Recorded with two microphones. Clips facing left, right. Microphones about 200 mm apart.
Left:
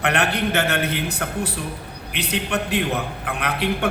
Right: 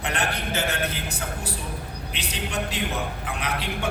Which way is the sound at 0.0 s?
65° left (ahead or behind).